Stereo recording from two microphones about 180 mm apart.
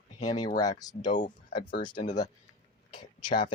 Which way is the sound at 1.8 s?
25° left (ahead or behind).